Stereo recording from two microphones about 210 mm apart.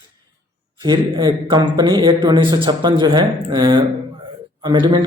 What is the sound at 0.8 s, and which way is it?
Speech, 20° right (ahead or behind).